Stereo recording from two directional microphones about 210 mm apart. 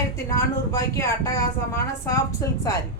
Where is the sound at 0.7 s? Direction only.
15° left (ahead or behind).